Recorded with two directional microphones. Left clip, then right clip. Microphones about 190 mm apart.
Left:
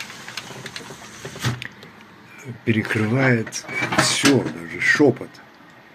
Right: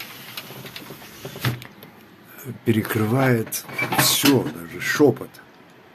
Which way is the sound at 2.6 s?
20° right (ahead or behind).